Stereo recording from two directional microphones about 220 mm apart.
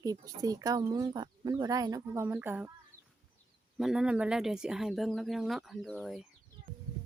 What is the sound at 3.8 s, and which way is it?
Speech, 5° right (ahead or behind).